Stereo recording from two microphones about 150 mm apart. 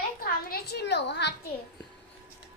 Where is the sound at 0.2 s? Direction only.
85° left.